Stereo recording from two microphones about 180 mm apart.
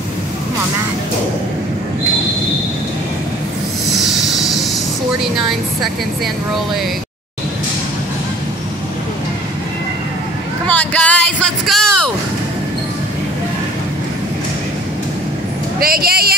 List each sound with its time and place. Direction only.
3.9 s train: centre (ahead or behind)
10.7 s speech: 10° left (ahead or behind)
15.8 s speech: 55° right (ahead or behind)